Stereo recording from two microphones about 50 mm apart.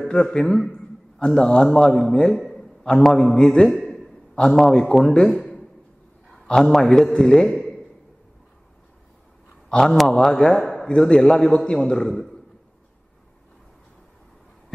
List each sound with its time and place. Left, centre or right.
0.1 s a man's voice: centre
9.7 s a man's voice: centre